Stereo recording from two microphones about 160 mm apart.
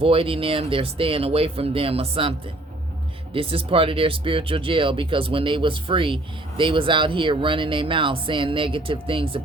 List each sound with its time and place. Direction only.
0.0 s speech: 35° right (ahead or behind)
3.3 s speech: 35° right (ahead or behind)